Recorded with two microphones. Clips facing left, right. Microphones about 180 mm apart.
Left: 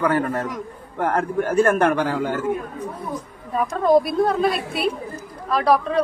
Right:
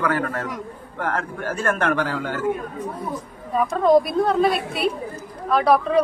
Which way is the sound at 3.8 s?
Centre (ahead or behind).